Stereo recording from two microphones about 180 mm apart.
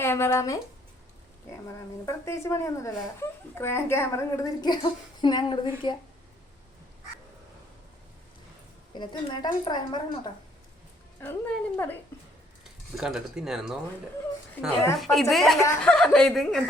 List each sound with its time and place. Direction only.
0.0 s speech: 15° left (ahead or behind)
1.6 s a woman's voice: 15° left (ahead or behind)
9.0 s a woman's voice: 25° left (ahead or behind)
11.2 s speech: 10° left (ahead or behind)
13.0 s speech: 5° right (ahead or behind)
14.9 s speech: centre (ahead or behind)
15.5 s speech: 15° left (ahead or behind)
15.8 s speech: 5° left (ahead or behind)